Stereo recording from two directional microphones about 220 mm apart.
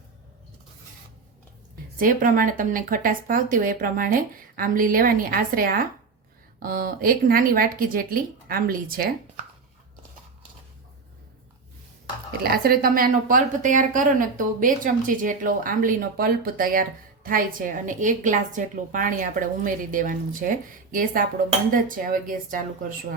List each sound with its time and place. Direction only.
2.0 s a woman's voice: 40° right (ahead or behind)
12.4 s a woman's voice: 45° right (ahead or behind)